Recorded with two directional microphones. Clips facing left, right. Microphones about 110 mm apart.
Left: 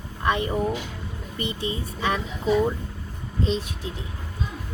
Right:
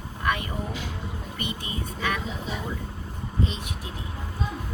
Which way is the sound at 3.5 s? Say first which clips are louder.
Left 8 dB; 30° left (ahead or behind).